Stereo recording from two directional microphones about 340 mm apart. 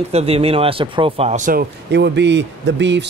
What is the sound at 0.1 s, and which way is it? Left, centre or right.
A man's voice, centre.